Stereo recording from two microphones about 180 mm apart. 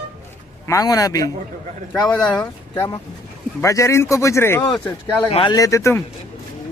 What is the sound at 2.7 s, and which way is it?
Speech, 15° left (ahead or behind).